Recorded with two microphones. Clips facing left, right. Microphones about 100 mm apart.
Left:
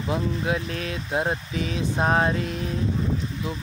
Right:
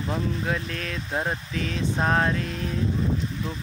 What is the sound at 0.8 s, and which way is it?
Speech, 15° left (ahead or behind).